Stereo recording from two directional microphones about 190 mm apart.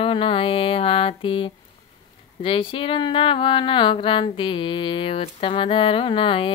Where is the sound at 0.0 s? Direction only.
30° left (ahead or behind).